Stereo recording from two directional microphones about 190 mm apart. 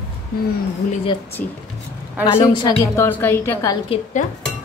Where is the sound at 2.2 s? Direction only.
25° left (ahead or behind).